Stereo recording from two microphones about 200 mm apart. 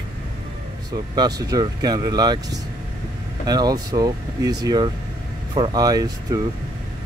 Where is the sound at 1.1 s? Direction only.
20° right (ahead or behind).